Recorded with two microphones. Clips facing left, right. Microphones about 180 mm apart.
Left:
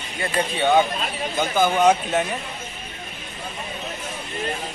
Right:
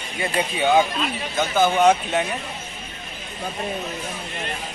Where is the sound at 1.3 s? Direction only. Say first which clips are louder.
Right 1 dB; 10° left (ahead or behind).